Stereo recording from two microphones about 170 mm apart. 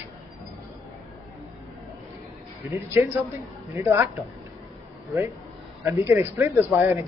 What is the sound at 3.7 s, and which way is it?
Speech, 15° right (ahead or behind).